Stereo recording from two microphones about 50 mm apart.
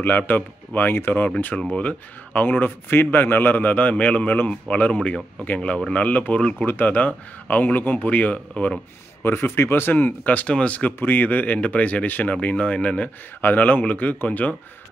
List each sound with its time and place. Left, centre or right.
0.3 s speech: left
2.9 s speech: left
9.2 s speech: left
11.0 s speech: left